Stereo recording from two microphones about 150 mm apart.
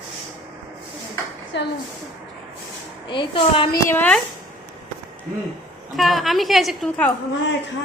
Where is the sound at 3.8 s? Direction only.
10° left (ahead or behind).